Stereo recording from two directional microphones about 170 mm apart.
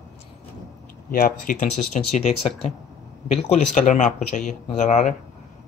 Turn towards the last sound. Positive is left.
turn(degrees=45)  # may be behind; listen again after turning